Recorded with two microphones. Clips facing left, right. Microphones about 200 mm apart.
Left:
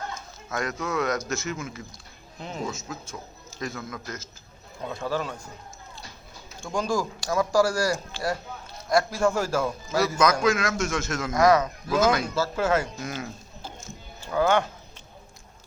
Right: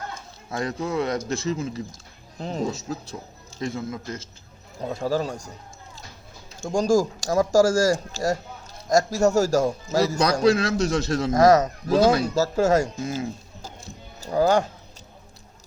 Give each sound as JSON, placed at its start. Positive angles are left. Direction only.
{"t": 0.1, "sound": "a man's voice", "side_deg": -30}
{"t": 6.6, "sound": "a man's voice", "side_deg": -45}
{"t": 13.0, "sound": "a man's voice", "side_deg": -25}
{"t": 13.6, "sound": "a sound", "side_deg": -40}